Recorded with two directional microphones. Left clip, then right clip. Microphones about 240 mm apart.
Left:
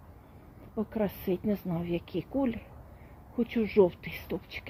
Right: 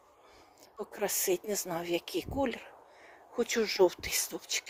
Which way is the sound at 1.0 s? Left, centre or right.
Right.